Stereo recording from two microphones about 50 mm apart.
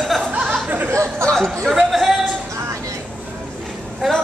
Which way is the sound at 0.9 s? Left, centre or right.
Right.